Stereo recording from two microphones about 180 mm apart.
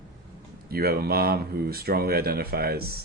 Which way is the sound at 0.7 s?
55° right (ahead or behind).